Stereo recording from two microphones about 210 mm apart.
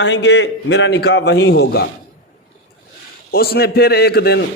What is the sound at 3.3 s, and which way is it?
A man's voice, 50° left (ahead or behind).